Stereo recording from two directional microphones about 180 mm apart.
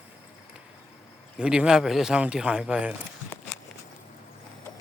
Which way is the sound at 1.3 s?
5° right (ahead or behind).